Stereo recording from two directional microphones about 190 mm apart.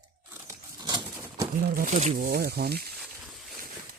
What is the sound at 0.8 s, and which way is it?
Bird, 20° right (ahead or behind).